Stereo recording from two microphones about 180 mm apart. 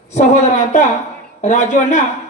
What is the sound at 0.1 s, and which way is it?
A woman's voice, 40° left (ahead or behind).